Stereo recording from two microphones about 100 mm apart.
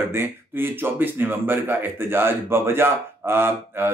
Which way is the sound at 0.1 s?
20° right (ahead or behind).